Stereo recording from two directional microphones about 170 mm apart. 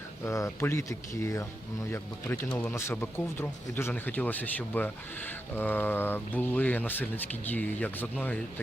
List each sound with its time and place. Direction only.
0.3 s speech: 15° left (ahead or behind)